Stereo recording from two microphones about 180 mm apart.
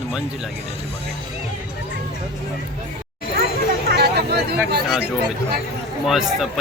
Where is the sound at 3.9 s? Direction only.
60° right (ahead or behind).